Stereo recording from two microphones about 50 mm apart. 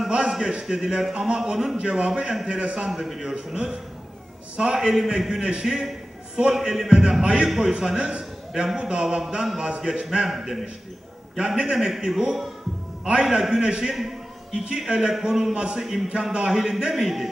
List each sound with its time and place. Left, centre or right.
0.5 s speech: centre
2.9 s a man's voice: centre